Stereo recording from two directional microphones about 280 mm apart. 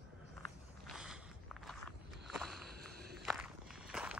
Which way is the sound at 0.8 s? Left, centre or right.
Centre.